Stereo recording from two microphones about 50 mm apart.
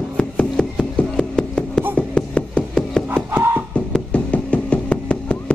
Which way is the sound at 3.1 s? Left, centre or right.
Right.